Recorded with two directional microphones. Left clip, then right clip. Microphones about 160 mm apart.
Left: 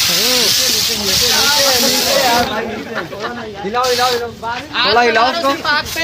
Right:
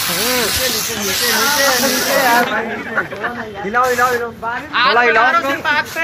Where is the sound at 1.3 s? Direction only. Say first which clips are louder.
Even; 20° left (ahead or behind).